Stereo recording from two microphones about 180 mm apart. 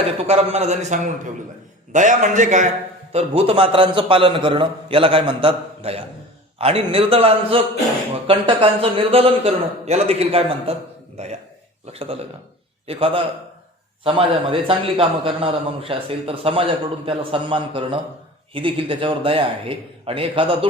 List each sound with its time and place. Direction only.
0.0 s a man's voice: 35° right (ahead or behind)